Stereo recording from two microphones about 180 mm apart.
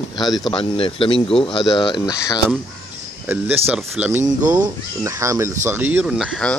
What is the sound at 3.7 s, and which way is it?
Speech, 5° right (ahead or behind).